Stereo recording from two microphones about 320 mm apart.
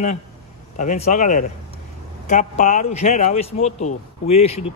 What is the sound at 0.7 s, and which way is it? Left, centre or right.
A man's voice, left.